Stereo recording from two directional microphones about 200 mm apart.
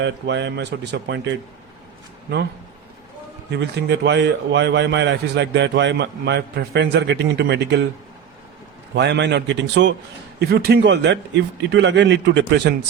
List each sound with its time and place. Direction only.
0.0 s a man's voice: 60° right (ahead or behind)
3.5 s a man's voice: 55° right (ahead or behind)
9.0 s a man's voice: 60° right (ahead or behind)